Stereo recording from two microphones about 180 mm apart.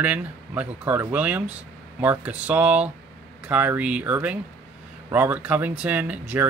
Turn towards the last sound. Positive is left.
turn(degrees=-10)  # may be behind; listen again after turning